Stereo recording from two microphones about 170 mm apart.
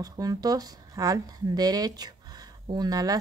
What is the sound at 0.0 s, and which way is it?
Speech, 20° right (ahead or behind).